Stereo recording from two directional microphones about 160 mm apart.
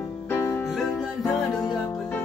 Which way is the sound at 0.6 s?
Centre (ahead or behind).